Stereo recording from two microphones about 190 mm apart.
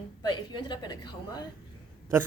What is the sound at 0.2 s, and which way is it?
Speech, 25° left (ahead or behind).